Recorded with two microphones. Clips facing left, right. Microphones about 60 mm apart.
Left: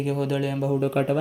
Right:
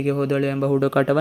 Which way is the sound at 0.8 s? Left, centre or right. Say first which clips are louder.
Right 5 dB; right.